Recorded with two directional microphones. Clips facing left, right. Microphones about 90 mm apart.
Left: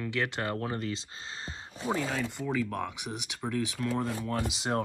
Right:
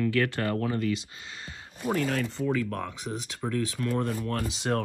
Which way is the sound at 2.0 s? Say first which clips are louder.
Right 4 dB; 5° left (ahead or behind).